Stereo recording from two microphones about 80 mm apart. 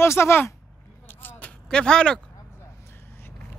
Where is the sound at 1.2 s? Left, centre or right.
Left.